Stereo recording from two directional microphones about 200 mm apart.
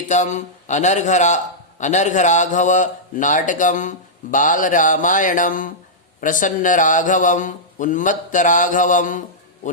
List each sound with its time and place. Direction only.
0.1 s a man's voice: 35° left (ahead or behind)